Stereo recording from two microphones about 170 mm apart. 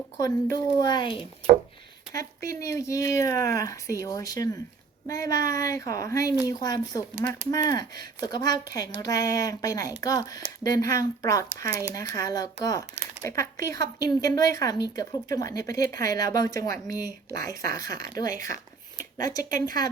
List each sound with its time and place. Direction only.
0.2 s a woman's voice: 20° left (ahead or behind)
2.6 s a woman's voice: 20° left (ahead or behind)
19.5 s speech: 55° right (ahead or behind)